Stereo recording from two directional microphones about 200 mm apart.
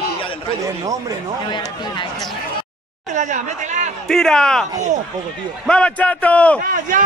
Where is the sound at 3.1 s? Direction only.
40° right (ahead or behind).